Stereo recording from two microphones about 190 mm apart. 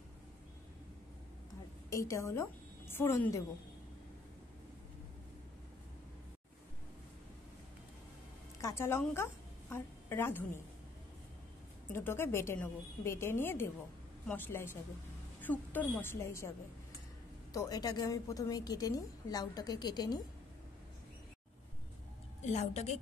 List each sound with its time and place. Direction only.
1.9 s a woman's voice: 15° left (ahead or behind)
8.5 s a woman's voice: 15° left (ahead or behind)
11.9 s a woman's voice: 10° left (ahead or behind)
22.5 s a woman's voice: 35° left (ahead or behind)